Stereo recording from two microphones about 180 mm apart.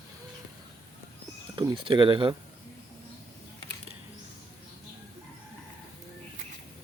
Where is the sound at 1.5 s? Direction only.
25° right (ahead or behind).